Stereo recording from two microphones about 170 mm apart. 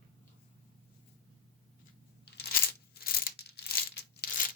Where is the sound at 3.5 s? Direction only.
70° left (ahead or behind).